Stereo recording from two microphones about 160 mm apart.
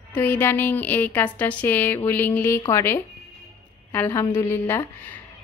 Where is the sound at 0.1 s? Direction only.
15° left (ahead or behind).